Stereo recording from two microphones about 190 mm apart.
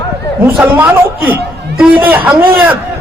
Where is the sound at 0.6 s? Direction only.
10° right (ahead or behind).